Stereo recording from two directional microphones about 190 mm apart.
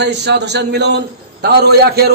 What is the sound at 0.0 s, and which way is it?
A man's voice, 60° right (ahead or behind).